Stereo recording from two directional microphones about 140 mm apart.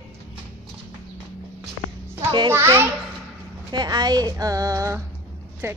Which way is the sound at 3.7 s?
30° right (ahead or behind).